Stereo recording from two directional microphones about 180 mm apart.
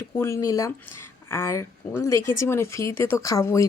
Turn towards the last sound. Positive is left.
turn(degrees=15)  # may be behind; listen again after turning